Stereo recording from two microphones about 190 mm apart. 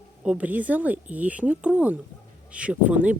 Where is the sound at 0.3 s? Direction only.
10° right (ahead or behind).